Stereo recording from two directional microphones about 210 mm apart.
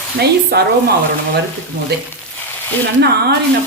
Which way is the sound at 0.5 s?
50° right (ahead or behind).